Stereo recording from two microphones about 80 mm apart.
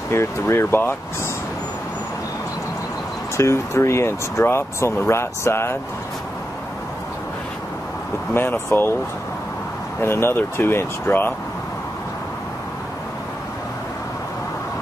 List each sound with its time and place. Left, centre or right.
0.1 s speech: left
3.3 s speech: left
8.3 s speech: left
10.0 s speech: left